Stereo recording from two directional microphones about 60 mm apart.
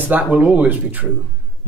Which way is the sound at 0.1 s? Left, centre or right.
Right.